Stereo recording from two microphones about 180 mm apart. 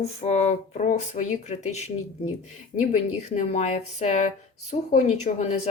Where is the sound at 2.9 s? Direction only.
40° left (ahead or behind).